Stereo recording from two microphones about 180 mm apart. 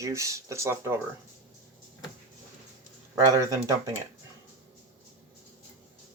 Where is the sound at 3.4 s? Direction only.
20° right (ahead or behind).